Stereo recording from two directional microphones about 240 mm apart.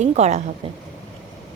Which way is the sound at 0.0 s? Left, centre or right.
Right.